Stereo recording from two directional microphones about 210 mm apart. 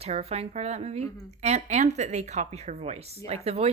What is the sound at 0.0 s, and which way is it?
Speech, 30° right (ahead or behind).